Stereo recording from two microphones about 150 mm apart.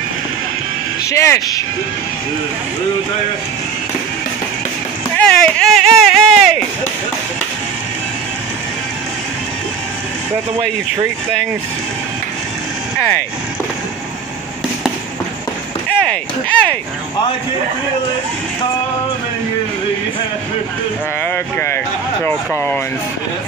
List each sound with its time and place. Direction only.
1.1 s speech: 20° left (ahead or behind)
5.1 s a sound: 5° left (ahead or behind)
16.0 s speech: 5° left (ahead or behind)
21.2 s speech: 10° left (ahead or behind)